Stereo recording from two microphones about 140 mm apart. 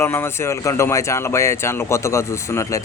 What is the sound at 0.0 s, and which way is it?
Speech, 15° left (ahead or behind).